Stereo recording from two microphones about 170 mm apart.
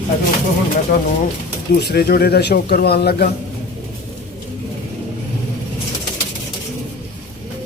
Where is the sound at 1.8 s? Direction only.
70° left (ahead or behind).